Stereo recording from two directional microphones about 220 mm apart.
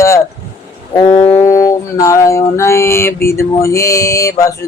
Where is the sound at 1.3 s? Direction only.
15° left (ahead or behind).